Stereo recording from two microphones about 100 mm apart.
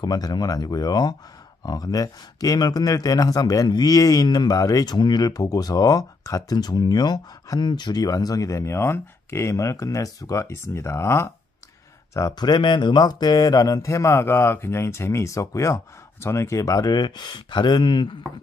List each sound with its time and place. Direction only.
0.0 s a man's voice: 40° left (ahead or behind)